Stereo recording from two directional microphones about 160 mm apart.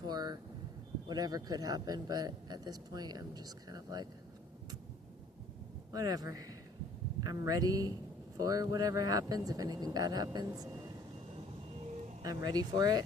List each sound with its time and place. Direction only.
0.1 s vehicle: 25° right (ahead or behind)
1.0 s a man's voice: 25° right (ahead or behind)
5.9 s a man's voice: 25° right (ahead or behind)
12.2 s a man's voice: 25° right (ahead or behind)